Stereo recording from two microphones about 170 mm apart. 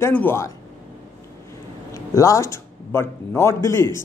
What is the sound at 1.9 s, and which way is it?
A man's voice, 20° left (ahead or behind).